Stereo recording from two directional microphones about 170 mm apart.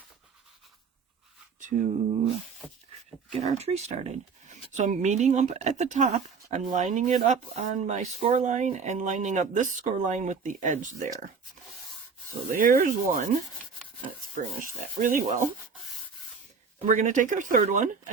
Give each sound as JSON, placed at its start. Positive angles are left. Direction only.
{"t": 1.5, "sound": "speech", "side_deg": -50}
{"t": 3.3, "sound": "speech", "side_deg": -35}
{"t": 12.3, "sound": "speech", "side_deg": -55}
{"t": 14.3, "sound": "speech", "side_deg": -50}
{"t": 16.8, "sound": "speech", "side_deg": -45}